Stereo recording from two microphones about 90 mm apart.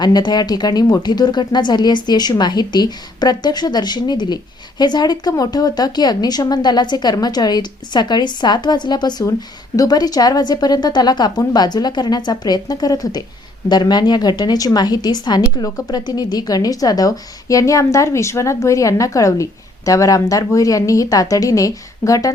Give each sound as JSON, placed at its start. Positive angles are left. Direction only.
{"t": 0.0, "sound": "a woman's voice", "side_deg": 50}